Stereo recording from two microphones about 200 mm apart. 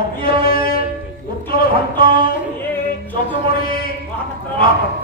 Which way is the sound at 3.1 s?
50° left (ahead or behind).